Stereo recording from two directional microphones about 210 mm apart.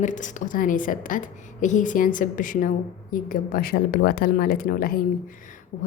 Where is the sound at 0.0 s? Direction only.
35° left (ahead or behind).